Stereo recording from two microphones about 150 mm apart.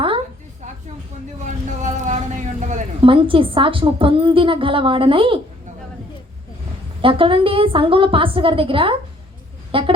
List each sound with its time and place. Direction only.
1.5 s a sound: 55° right (ahead or behind)
3.0 s a woman's voice: 35° right (ahead or behind)
7.0 s a woman's voice: 35° right (ahead or behind)